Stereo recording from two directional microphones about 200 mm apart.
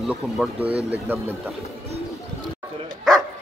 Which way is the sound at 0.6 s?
55° right (ahead or behind).